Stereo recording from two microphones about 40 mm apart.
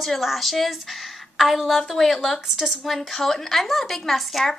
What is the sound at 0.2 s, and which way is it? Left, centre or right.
A woman's voice, centre.